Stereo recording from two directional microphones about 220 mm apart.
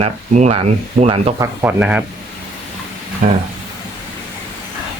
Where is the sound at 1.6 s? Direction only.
5° right (ahead or behind).